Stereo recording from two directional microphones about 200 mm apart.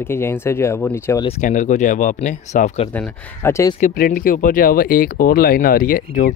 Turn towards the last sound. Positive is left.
turn(degrees=45)  # may be behind; listen again after turning